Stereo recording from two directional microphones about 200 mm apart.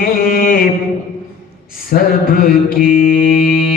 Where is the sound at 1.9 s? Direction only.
45° left (ahead or behind).